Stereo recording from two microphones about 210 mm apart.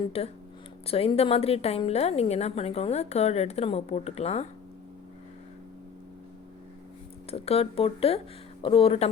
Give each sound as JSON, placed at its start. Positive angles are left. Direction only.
{"t": 0.9, "sound": "a woman's voice", "side_deg": 30}
{"t": 7.3, "sound": "a woman's voice", "side_deg": 30}